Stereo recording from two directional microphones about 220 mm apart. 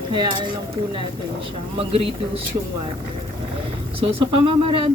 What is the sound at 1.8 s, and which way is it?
Speech, 25° right (ahead or behind).